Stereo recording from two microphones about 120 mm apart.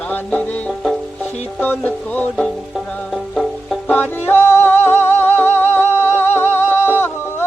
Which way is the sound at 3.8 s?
15° left (ahead or behind).